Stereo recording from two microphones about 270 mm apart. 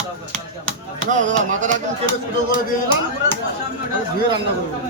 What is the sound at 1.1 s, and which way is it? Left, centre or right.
Music, right.